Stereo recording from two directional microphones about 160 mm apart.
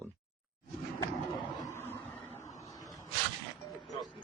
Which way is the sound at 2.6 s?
20° left (ahead or behind).